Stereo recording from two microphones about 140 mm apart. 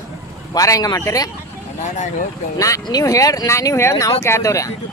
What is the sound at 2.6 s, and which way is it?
Speech, 25° left (ahead or behind).